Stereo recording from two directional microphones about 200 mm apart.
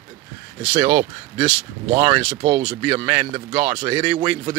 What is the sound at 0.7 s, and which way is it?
Speech, 15° right (ahead or behind).